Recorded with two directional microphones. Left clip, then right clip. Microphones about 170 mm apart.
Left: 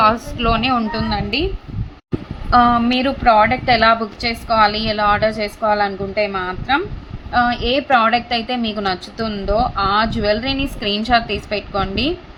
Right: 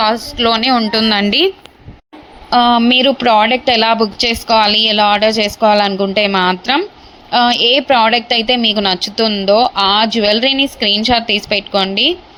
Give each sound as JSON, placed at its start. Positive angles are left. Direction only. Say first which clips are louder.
{"t": 0.3, "sound": "a woman's voice", "louder": "right 5 dB", "side_deg": -20}
{"t": 0.9, "sound": "a woman's voice", "louder": "right 8 dB", "side_deg": -40}
{"t": 2.5, "sound": "a woman's voice", "louder": "right 3 dB", "side_deg": -20}
{"t": 7.3, "sound": "a woman's voice", "louder": "right 6 dB", "side_deg": -25}